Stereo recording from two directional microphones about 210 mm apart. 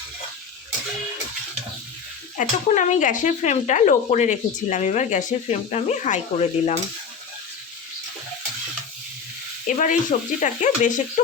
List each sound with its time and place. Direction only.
2.4 s speech: 35° left (ahead or behind)
9.6 s speech: 40° left (ahead or behind)